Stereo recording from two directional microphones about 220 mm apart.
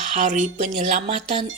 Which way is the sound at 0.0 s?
35° right (ahead or behind).